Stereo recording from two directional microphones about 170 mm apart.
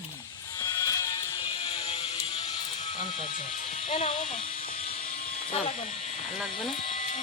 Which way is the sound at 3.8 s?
35° left (ahead or behind).